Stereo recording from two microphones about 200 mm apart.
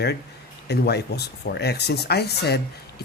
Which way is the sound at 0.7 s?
55° left (ahead or behind).